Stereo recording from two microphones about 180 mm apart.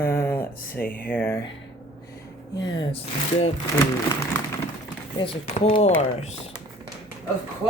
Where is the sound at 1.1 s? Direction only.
10° left (ahead or behind).